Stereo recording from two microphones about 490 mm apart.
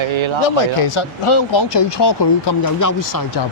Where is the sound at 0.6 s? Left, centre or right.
Left.